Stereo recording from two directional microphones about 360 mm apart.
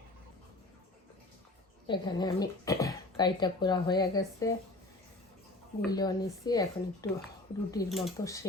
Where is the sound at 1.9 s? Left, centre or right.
Centre.